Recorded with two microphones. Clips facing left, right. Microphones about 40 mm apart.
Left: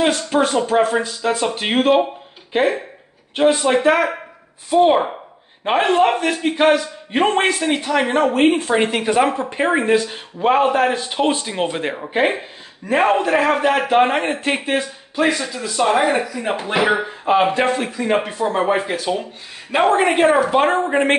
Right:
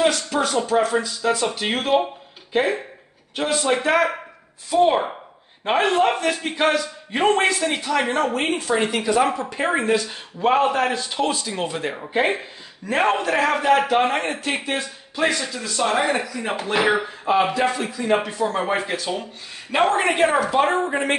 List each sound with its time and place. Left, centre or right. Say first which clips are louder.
0.3 s a man's voice: left 4 dB; left
3.8 s a man's voice: left 3 dB; centre
4.6 s a man's voice: left 4 dB; centre
10.9 s a man's voice: left 4 dB; left
12.1 s speech: left 2 dB; centre
13.8 s a man's voice: left 4 dB; left
14.7 s speech: left 5 dB; centre
17.6 s a man's voice: left 3 dB; left
17.8 s a man's voice: left 2 dB; left; by 20.1 s centre
20.8 s a man's voice: left 5 dB; left